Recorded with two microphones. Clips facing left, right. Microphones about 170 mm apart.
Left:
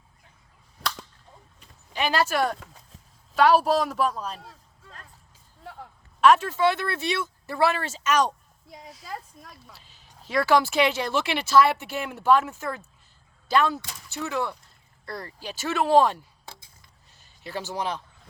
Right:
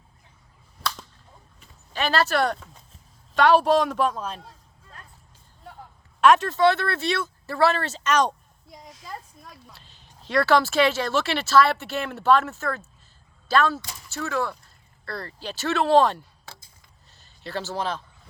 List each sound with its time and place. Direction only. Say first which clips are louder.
1.9 s speech: right 1 dB; 15° left (ahead or behind)
6.1 s speech: right 1 dB; centre (ahead or behind)
8.7 s a sound: left 1 dB; centre (ahead or behind)
9.7 s speech: even; 10° left (ahead or behind)